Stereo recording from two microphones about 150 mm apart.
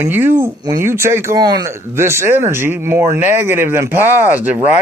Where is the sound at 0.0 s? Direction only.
15° right (ahead or behind).